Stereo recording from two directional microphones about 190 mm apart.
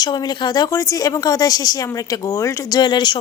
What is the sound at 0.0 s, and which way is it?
A woman's voice, 20° left (ahead or behind).